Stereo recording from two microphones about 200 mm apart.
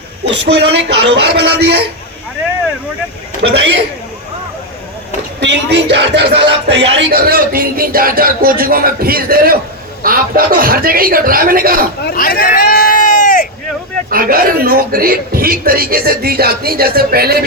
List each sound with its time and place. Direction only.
0.3 s music: 60° right (ahead or behind)
3.4 s music: 60° right (ahead or behind)
5.4 s music: 60° right (ahead or behind)
7.2 s a man's voice: 50° right (ahead or behind)
12.0 s a sound: 50° left (ahead or behind)
14.1 s a man's voice: 45° right (ahead or behind)